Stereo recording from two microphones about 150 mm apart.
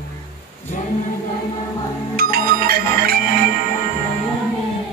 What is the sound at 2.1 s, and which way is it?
Music, 80° right.